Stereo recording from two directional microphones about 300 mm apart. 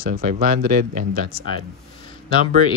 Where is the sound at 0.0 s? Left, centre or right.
Right.